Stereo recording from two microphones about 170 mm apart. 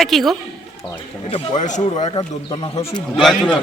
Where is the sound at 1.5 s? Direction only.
45° left (ahead or behind).